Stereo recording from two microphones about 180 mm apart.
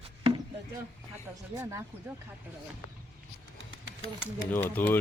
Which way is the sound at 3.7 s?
90° right.